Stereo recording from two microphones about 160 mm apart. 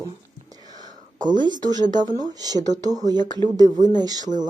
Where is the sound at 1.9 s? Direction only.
25° right (ahead or behind).